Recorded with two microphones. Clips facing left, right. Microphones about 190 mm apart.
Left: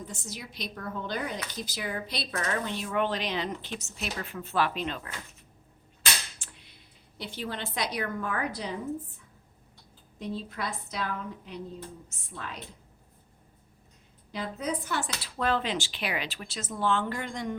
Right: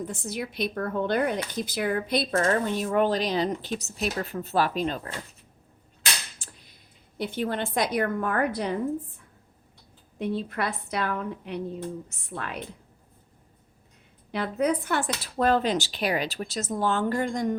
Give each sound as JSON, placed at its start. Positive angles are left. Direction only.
{"t": 0.1, "sound": "a woman's voice", "side_deg": -55}
{"t": 6.4, "sound": "a sound", "side_deg": -40}
{"t": 7.2, "sound": "speech", "side_deg": -50}
{"t": 10.2, "sound": "a woman's voice", "side_deg": -65}
{"t": 14.3, "sound": "speech", "side_deg": -65}